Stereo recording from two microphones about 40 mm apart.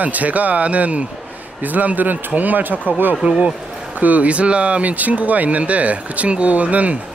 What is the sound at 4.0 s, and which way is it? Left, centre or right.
A man's voice, right.